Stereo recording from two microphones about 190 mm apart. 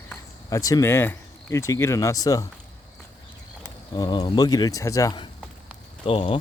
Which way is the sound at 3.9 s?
20° left (ahead or behind).